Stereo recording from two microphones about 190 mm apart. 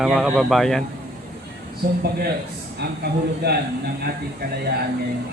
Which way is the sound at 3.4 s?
60° right (ahead or behind).